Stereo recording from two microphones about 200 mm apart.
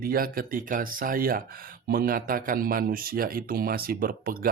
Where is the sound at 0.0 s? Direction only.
45° right (ahead or behind).